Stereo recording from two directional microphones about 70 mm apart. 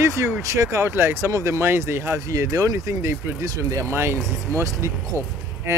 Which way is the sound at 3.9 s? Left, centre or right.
Right.